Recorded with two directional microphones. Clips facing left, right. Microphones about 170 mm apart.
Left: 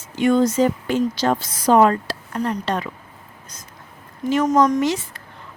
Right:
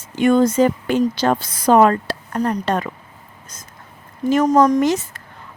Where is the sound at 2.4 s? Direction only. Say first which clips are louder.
Right 3 dB; 45° right (ahead or behind).